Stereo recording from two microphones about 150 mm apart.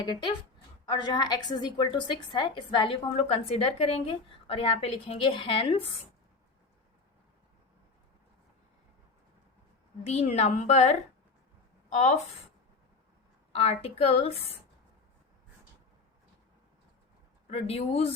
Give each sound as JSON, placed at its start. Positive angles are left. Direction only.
{"t": 0.0, "sound": "a woman's voice", "side_deg": 30}
{"t": 10.1, "sound": "a woman's voice", "side_deg": 45}
{"t": 13.5, "sound": "a woman's voice", "side_deg": 40}
{"t": 17.5, "sound": "a woman's voice", "side_deg": 40}